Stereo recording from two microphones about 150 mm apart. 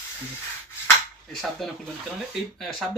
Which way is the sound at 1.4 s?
Centre (ahead or behind).